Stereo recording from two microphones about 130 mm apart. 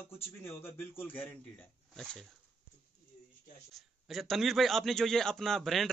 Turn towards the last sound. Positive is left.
turn(degrees=0)  # may be behind; listen again after turning